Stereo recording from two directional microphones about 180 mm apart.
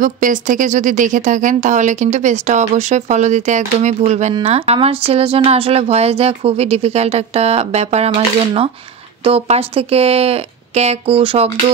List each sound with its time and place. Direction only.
0.0 s speech: 45° right (ahead or behind)
9.2 s speech: 30° right (ahead or behind)